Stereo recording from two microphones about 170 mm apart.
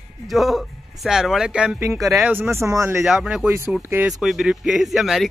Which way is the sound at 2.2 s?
10° right (ahead or behind).